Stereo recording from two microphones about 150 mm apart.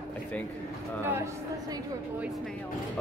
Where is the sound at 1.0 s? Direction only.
15° right (ahead or behind).